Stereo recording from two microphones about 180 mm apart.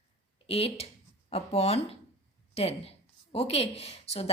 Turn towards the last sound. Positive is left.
turn(degrees=35)  # may be behind; listen again after turning